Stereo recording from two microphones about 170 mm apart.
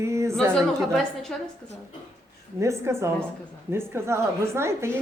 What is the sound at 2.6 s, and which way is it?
A woman's voice, 15° right (ahead or behind).